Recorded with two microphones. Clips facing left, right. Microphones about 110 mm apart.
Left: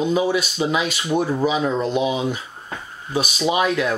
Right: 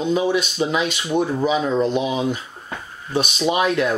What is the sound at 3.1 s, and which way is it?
Speech, centre (ahead or behind).